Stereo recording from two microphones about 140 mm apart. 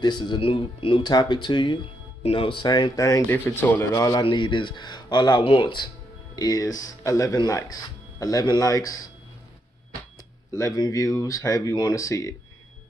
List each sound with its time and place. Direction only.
0.0 s speech: 30° left (ahead or behind)
3.4 s speech: 15° left (ahead or behind)
10.6 s speech: 25° left (ahead or behind)